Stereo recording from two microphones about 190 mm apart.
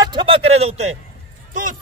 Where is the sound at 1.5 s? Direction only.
45° right (ahead or behind).